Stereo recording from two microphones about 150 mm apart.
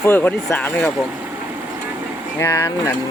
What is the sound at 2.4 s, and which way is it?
Speech, 20° left (ahead or behind).